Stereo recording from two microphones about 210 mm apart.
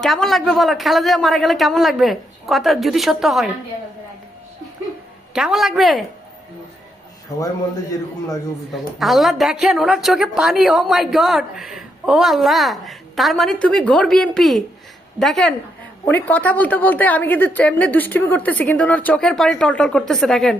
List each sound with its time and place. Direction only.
0.0 s a woman's voice: centre (ahead or behind)
5.3 s a woman's voice: 5° right (ahead or behind)
7.3 s a woman's voice: 15° left (ahead or behind)
8.7 s a woman's voice: centre (ahead or behind)